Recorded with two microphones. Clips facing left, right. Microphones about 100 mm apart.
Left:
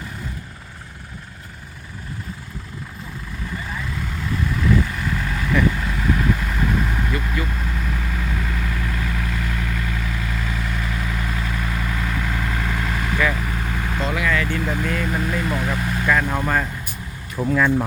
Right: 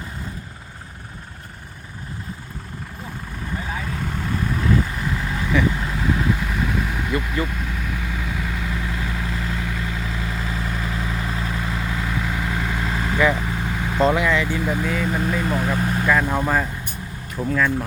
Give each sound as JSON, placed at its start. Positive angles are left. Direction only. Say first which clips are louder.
{"t": 3.9, "sound": "vehicle", "louder": "even", "side_deg": -35}
{"t": 15.4, "sound": "speech", "louder": "right 2 dB", "side_deg": -25}
{"t": 16.0, "sound": "speech", "louder": "even", "side_deg": -5}
{"t": 17.3, "sound": "speech", "louder": "left 2 dB", "side_deg": 10}